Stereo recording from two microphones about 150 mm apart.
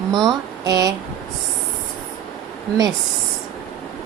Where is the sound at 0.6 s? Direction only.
25° right (ahead or behind).